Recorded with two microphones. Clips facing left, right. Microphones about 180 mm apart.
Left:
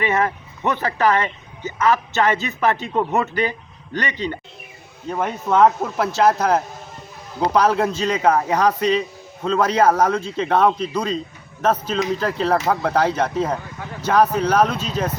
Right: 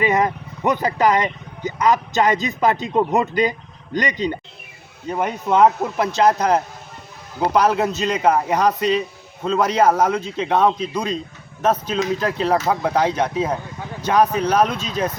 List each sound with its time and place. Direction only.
0.0 s speech: 15° right (ahead or behind)
6.1 s speech: 5° left (ahead or behind)
7.3 s speech: 10° right (ahead or behind)
14.8 s speech: 10° left (ahead or behind)